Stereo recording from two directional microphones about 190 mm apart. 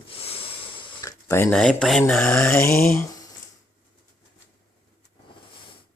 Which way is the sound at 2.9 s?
15° left (ahead or behind).